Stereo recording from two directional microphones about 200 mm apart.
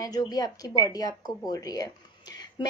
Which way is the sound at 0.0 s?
20° left (ahead or behind).